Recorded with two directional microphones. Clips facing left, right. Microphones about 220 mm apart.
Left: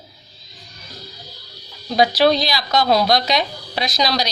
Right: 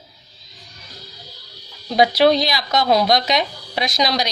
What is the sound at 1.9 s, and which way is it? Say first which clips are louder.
Speech: right 1 dB; 20° right (ahead or behind).